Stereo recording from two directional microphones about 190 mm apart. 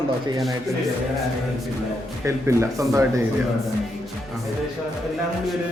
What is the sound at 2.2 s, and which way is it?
Speech, 15° right (ahead or behind).